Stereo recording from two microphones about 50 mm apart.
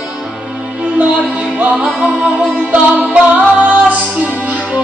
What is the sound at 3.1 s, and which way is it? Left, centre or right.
Music, right.